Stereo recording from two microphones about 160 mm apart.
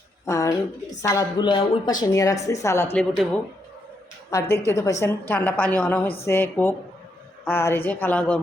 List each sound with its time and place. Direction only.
0.3 s a woman's voice: 20° left (ahead or behind)
2.0 s a woman's voice: 20° left (ahead or behind)
4.3 s a woman's voice: 20° left (ahead or behind)